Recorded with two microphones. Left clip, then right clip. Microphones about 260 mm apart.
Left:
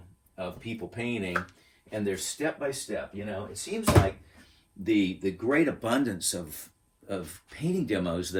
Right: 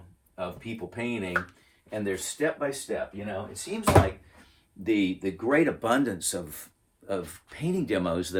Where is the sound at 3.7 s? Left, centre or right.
Centre.